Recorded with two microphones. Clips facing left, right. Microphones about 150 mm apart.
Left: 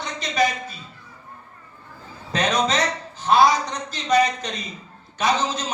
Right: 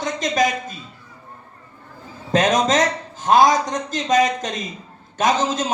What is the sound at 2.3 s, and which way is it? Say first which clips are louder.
A man's voice: right 5 dB; 45° right (ahead or behind).